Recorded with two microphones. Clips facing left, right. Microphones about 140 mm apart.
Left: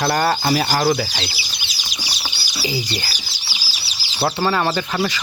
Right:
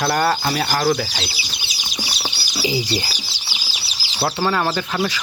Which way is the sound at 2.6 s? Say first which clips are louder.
Right 3 dB; 20° right (ahead or behind).